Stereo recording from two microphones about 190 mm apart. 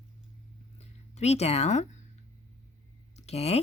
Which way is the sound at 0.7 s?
35° left (ahead or behind).